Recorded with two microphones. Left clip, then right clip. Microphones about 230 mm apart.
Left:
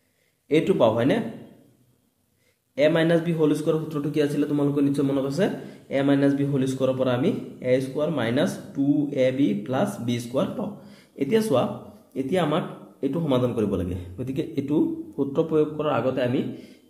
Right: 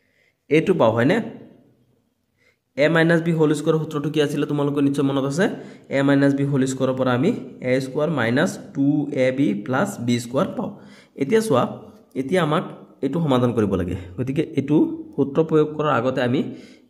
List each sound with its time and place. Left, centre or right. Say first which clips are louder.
0.5 s a man's voice: right 3 dB; right
2.7 s a man's voice: right 3 dB; right